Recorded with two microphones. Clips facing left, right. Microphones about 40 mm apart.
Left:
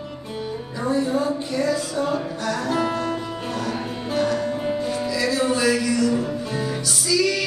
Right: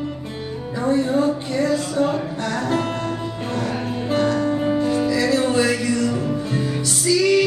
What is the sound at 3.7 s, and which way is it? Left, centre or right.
Music, right.